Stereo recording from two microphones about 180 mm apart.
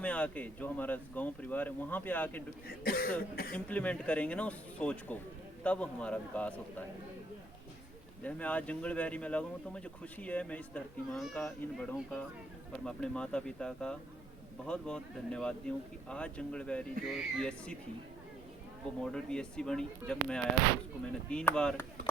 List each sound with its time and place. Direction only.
0.0 s speech: 5° left (ahead or behind)
2.6 s cough: 55° left (ahead or behind)
3.5 s speech: 10° left (ahead or behind)
8.2 s speech: 10° left (ahead or behind)
19.1 s speech: 5° left (ahead or behind)